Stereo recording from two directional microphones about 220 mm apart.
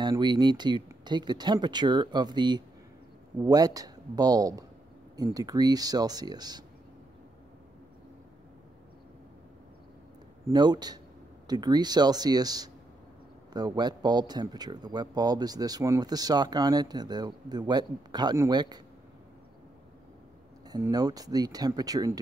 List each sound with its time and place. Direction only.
0.0 s speech: 20° right (ahead or behind)
10.5 s speech: 20° right (ahead or behind)
20.7 s speech: 15° right (ahead or behind)